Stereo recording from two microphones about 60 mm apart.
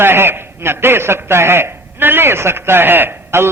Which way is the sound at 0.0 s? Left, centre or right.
Right.